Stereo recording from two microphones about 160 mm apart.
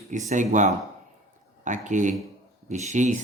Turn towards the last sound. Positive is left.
turn(degrees=-50)  # may be behind; listen again after turning